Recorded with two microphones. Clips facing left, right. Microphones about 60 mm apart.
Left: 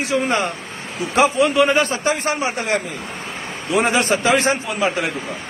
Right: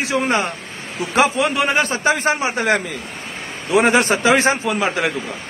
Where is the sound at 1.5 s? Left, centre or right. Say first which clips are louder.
Left 2 dB; right.